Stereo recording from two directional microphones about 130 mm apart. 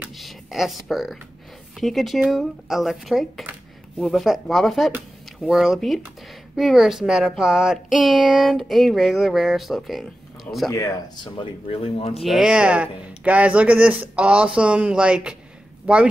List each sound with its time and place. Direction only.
0.2 s speech: centre (ahead or behind)
11.3 s speech: 45° left (ahead or behind)
12.2 s speech: centre (ahead or behind)